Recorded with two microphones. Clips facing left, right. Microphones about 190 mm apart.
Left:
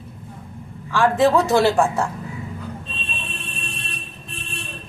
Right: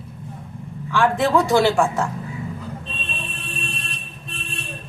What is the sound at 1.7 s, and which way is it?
Speech, 20° left (ahead or behind).